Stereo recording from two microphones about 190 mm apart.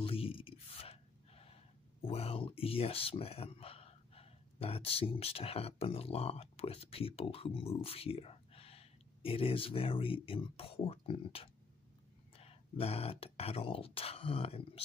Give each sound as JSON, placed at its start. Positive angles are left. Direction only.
{"t": 0.0, "sound": "speech", "side_deg": 30}